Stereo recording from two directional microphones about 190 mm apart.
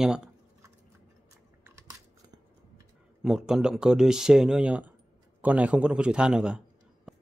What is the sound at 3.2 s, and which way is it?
Speech, centre (ahead or behind).